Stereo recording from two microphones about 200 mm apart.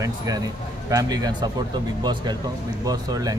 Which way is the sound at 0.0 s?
20° right (ahead or behind).